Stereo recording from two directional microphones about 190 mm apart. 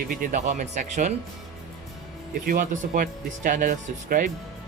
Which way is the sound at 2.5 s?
50° right (ahead or behind).